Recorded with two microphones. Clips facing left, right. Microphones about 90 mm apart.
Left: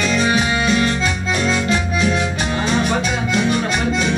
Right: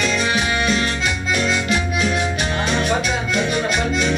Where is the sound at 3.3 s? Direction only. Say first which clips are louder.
Left 3 dB; 30° left (ahead or behind).